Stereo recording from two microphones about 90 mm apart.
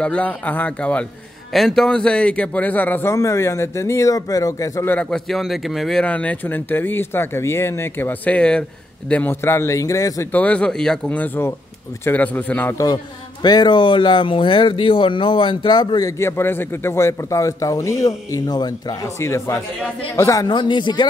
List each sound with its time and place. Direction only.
0.0 s speech: 15° left (ahead or behind)
1.5 s speech: 5° left (ahead or behind); by 3.1 s 20° left (ahead or behind)
3.1 s a man's voice: 35° left (ahead or behind)
5.1 s speech: centre (ahead or behind)
6.0 s speech: 15° left (ahead or behind)
9.1 s a man's voice: 20° left (ahead or behind); by 10.2 s 40° left (ahead or behind)
10.3 s speech: 15° left (ahead or behind)
11.1 s speech: 25° left (ahead or behind)
12.7 s a man's voice: 50° left (ahead or behind)
16.2 s a man's voice: 30° left (ahead or behind); by 18.9 s 50° left (ahead or behind)
19.1 s a man's voice: 30° left (ahead or behind)
20.4 s a man's voice: 60° left (ahead or behind)